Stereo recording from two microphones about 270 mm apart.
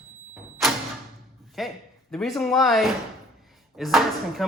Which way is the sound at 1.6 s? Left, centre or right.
Centre.